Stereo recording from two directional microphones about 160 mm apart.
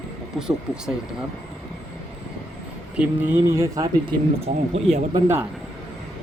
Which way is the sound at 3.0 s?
15° right (ahead or behind).